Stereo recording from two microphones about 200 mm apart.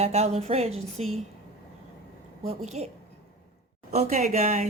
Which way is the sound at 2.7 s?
35° right (ahead or behind).